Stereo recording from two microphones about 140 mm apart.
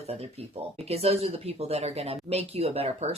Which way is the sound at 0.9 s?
45° right (ahead or behind).